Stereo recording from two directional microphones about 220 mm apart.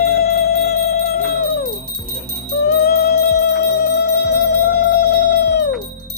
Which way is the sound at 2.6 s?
45° left (ahead or behind).